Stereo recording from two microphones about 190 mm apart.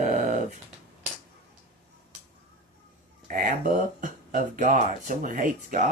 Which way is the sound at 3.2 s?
45° right (ahead or behind).